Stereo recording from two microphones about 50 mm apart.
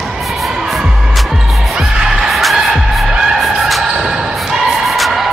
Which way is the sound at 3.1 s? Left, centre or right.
Centre.